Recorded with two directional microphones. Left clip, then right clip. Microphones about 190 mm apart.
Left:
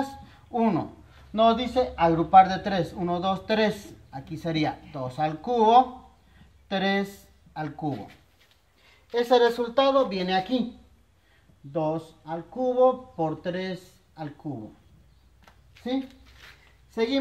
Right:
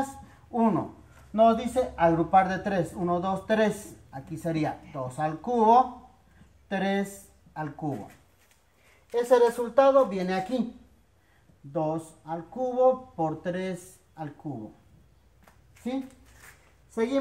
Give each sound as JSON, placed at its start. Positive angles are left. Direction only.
{"t": 0.5, "sound": "speech", "side_deg": 20}
{"t": 9.1, "sound": "a woman's voice", "side_deg": 35}
{"t": 9.8, "sound": "speech", "side_deg": 15}
{"t": 11.7, "sound": "speech", "side_deg": 10}
{"t": 16.9, "sound": "a woman's voice", "side_deg": 20}